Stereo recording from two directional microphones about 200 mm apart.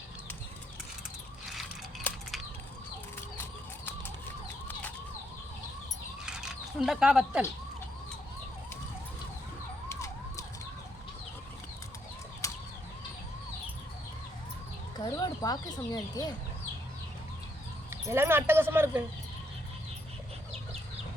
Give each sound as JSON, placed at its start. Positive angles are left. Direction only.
{"t": 1.5, "sound": "biting", "side_deg": 0}
{"t": 6.2, "sound": "a sound", "side_deg": -5}
{"t": 9.9, "sound": "emergency vehicle", "side_deg": 15}
{"t": 12.4, "sound": "emergency vehicle", "side_deg": 15}
{"t": 14.9, "sound": "speech", "side_deg": 20}
{"t": 18.1, "sound": "speech", "side_deg": -10}